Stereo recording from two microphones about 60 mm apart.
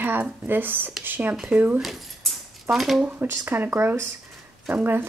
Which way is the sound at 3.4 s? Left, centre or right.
Right.